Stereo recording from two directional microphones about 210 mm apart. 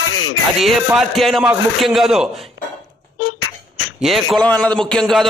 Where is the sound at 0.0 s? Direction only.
75° left (ahead or behind).